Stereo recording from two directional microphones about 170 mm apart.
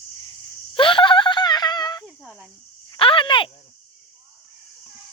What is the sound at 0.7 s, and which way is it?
Wail, 30° left (ahead or behind).